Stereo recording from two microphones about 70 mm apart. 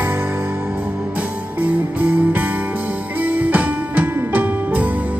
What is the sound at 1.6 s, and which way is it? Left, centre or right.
Music, right.